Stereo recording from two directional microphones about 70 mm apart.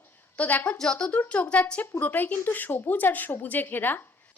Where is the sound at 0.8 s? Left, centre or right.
Centre; by 3.9 s left.